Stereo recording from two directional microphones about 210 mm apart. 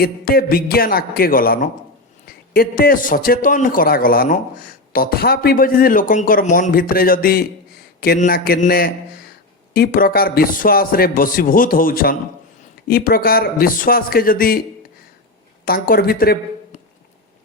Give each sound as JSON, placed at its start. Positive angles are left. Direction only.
{"t": 0.0, "sound": "a man's voice", "side_deg": 45}
{"t": 15.6, "sound": "speech", "side_deg": 45}